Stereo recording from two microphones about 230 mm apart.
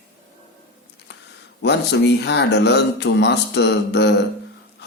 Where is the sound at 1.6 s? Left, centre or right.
Left.